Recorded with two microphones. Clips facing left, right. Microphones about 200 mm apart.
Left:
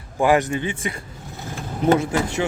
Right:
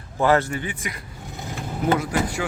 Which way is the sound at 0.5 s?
25° left (ahead or behind).